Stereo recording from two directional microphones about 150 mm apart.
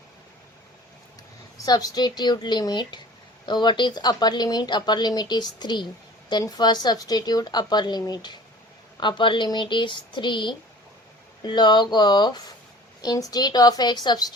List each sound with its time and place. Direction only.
1.6 s a woman's voice: 25° left (ahead or behind)